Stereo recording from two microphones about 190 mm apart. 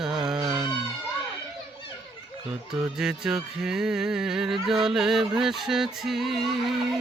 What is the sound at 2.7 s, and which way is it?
Music, 5° right (ahead or behind).